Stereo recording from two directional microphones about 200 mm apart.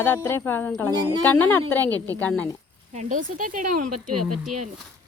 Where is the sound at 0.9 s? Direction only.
20° right (ahead or behind).